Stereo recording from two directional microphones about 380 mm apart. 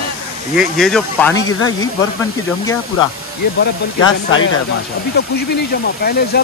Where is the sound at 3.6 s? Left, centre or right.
Left.